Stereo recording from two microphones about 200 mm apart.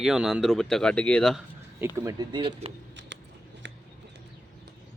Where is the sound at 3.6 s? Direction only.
65° right (ahead or behind).